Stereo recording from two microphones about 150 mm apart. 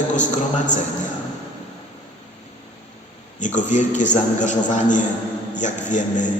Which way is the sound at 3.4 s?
55° left (ahead or behind).